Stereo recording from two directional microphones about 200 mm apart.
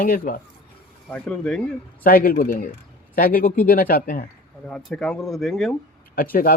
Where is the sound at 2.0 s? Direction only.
45° left (ahead or behind).